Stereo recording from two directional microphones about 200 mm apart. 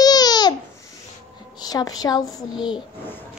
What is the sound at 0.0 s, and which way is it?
Babbling, 20° left (ahead or behind).